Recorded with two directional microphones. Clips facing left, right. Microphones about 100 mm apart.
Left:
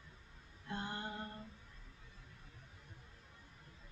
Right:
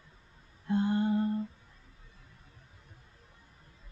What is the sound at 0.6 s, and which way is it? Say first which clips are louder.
Female singing: right 15 dB; 25° right (ahead or behind).